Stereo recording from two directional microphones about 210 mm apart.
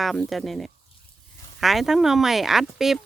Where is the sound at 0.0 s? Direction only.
Centre (ahead or behind).